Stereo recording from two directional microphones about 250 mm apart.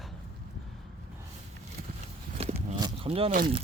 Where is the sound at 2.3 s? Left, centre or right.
Right.